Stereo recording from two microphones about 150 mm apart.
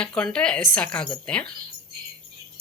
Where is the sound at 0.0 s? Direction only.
5° left (ahead or behind).